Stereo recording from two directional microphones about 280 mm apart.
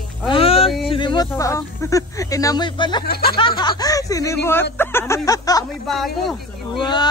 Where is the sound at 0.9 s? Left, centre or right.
Centre.